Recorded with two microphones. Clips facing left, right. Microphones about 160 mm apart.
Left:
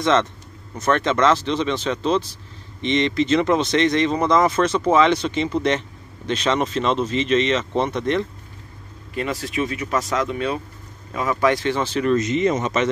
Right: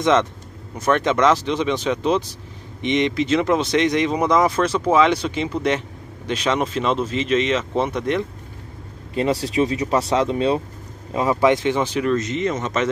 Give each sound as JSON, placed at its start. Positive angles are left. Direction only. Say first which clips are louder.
{"t": 0.0, "sound": "speech", "louder": "right 1 dB", "side_deg": -10}
{"t": 9.1, "sound": "speech", "louder": "right 5 dB", "side_deg": -30}
{"t": 12.2, "sound": "speech", "louder": "left 3 dB", "side_deg": 15}